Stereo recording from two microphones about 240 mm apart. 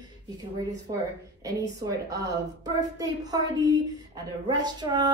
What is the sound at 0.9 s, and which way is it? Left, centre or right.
Speech, centre.